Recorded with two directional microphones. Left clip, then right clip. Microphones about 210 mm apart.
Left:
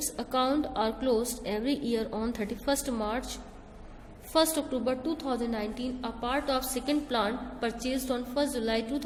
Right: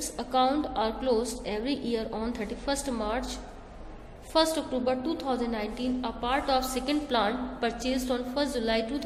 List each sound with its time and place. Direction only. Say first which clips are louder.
0.0 s a woman's voice: right 3 dB; 30° left (ahead or behind)